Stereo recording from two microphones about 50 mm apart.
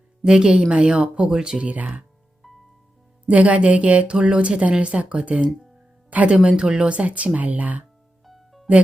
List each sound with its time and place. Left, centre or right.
0.3 s a woman's voice: centre
3.2 s a woman's voice: right
8.2 s music: centre